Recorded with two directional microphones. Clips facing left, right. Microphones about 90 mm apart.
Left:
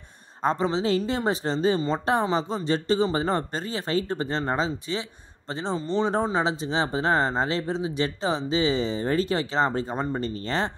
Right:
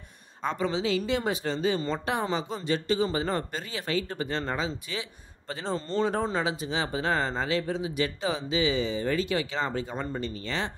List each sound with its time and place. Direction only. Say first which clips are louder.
0.4 s speech: left 4 dB; 35° left (ahead or behind)